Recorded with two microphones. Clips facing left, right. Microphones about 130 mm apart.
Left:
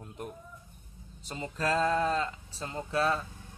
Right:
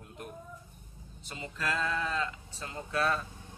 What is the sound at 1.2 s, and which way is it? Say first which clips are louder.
Speech: left 4 dB; 35° left (ahead or behind).